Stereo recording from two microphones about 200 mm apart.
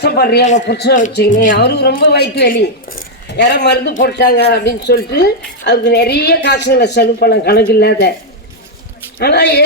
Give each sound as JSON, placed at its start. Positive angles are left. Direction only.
{"t": 0.0, "sound": "a woman's voice", "side_deg": 55}
{"t": 9.1, "sound": "a woman's voice", "side_deg": 55}